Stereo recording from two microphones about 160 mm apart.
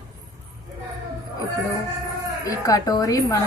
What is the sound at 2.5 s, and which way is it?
Speech, 20° left (ahead or behind).